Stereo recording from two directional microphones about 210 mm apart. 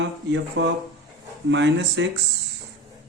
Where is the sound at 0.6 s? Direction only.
60° right (ahead or behind).